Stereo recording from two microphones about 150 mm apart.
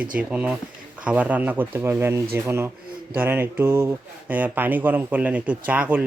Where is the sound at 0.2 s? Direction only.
10° right (ahead or behind).